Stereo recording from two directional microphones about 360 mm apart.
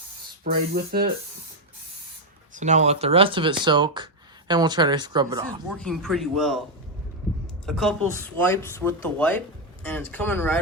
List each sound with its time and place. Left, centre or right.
0.7 s speech: right
2.6 s speech: centre
5.7 s speech: centre
7.7 s speech: centre